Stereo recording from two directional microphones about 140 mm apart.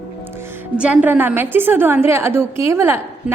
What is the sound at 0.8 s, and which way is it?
A woman's voice, 10° right (ahead or behind).